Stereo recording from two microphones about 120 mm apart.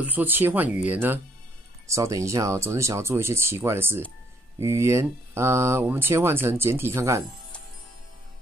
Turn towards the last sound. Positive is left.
turn(degrees=-25)  # may be behind; listen again after turning